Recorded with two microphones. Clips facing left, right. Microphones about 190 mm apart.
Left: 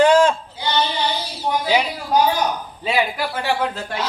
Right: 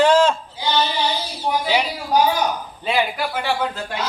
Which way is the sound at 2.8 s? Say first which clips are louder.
Even; 5° left (ahead or behind).